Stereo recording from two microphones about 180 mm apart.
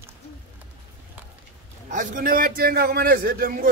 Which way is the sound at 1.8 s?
45° right (ahead or behind).